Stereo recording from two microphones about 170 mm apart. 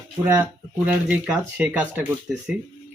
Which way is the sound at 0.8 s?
10° right (ahead or behind).